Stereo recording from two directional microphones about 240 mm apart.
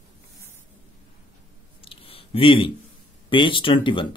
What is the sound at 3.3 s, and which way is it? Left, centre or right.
Speech, left.